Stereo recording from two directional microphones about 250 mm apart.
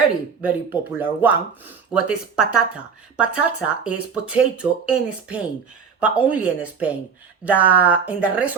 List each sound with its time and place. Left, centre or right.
0.4 s speech: centre